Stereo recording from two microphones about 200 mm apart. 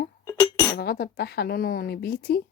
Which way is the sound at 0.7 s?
50° left (ahead or behind).